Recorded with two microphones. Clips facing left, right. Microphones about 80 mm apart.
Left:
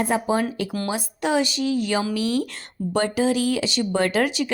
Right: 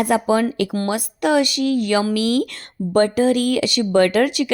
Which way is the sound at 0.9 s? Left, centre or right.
Right.